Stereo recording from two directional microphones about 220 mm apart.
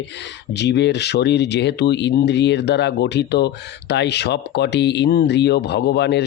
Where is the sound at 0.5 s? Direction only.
50° left (ahead or behind).